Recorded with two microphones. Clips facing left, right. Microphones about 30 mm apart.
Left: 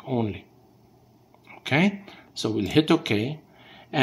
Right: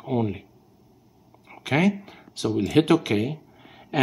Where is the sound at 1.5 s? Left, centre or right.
Centre.